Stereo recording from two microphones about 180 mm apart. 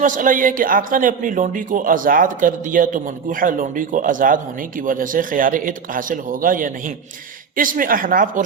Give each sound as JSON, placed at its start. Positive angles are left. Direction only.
{"t": 0.0, "sound": "a man's voice", "side_deg": -45}